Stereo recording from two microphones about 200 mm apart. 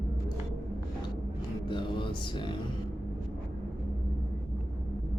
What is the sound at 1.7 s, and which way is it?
Mantra, 25° left (ahead or behind).